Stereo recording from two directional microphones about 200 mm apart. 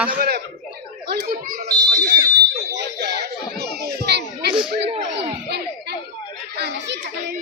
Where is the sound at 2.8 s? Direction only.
55° right (ahead or behind).